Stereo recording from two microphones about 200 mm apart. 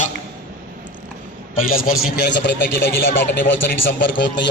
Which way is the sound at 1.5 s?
45° left (ahead or behind).